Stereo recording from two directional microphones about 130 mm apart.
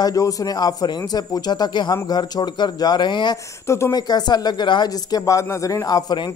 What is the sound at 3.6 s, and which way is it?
Speech, 20° left (ahead or behind).